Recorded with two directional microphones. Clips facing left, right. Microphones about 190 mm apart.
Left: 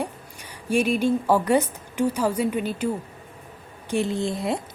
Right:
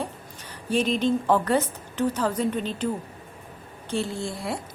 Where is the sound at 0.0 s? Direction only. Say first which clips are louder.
Left 2 dB; 10° left (ahead or behind).